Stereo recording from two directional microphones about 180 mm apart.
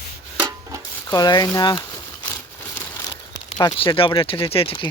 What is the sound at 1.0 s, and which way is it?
Speech, 20° left (ahead or behind).